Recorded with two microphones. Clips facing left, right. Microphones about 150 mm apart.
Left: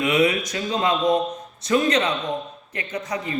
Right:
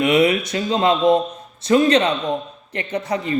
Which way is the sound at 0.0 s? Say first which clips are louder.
Right 4 dB; 30° right (ahead or behind).